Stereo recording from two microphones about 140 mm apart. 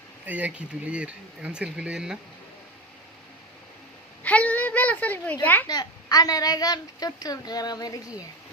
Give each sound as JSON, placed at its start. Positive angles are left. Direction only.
{"t": 0.3, "sound": "speech", "side_deg": -10}
{"t": 4.2, "sound": "a woman's voice", "side_deg": 10}
{"t": 5.6, "sound": "a woman's voice", "side_deg": 30}